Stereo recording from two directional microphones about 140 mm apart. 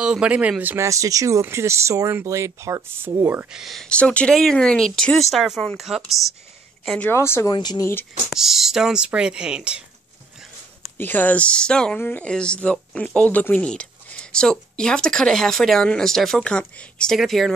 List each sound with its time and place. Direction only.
0.0 s speech: 5° right (ahead or behind)
3.6 s a woman's voice: 5° left (ahead or behind)
7.1 s speech: 15° left (ahead or behind)
7.5 s speech: 30° left (ahead or behind)
8.3 s speech: centre (ahead or behind)
11.0 s speech: 15° left (ahead or behind)